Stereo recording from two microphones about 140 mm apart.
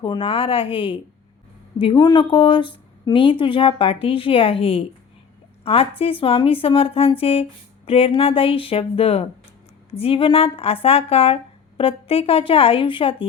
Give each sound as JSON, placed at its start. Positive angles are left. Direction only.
{"t": 0.0, "sound": "a woman's voice", "side_deg": 35}